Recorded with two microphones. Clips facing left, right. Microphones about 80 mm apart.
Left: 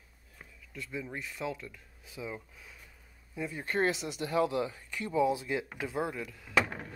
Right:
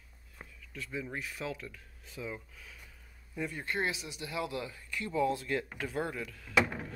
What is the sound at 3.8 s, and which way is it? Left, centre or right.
Speech, left.